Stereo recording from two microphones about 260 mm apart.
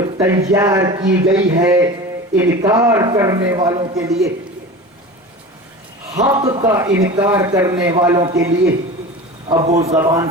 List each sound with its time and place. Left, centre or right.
0.2 s a man's voice: centre
6.1 s a man's voice: centre